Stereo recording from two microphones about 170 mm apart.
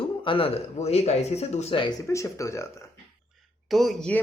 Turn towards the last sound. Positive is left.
turn(degrees=5)  # may be behind; listen again after turning